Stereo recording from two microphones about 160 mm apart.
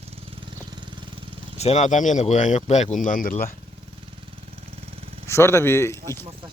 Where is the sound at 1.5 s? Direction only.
45° left (ahead or behind); by 3.5 s 60° left (ahead or behind).